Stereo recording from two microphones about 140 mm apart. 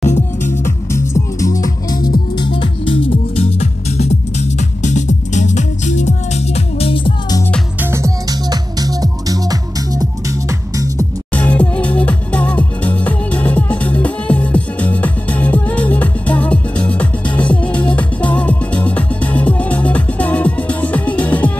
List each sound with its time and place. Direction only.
0.0 s music: 55° left (ahead or behind)
0.5 s music: 20° left (ahead or behind); by 7.2 s 40° left (ahead or behind)
7.8 s music: 20° right (ahead or behind)
11.3 s music: 10° left (ahead or behind)